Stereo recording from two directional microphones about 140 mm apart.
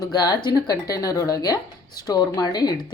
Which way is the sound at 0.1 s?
30° left (ahead or behind).